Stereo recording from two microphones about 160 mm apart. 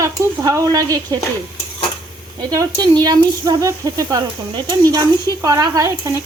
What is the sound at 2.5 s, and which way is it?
Speech, 25° right (ahead or behind).